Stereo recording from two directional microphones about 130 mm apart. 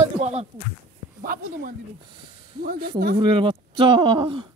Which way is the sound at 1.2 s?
90° right.